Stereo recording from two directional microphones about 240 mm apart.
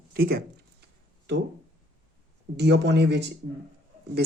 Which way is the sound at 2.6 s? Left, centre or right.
Right.